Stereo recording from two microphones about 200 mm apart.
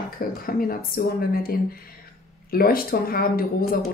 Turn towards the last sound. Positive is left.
turn(degrees=45)  # may be behind; listen again after turning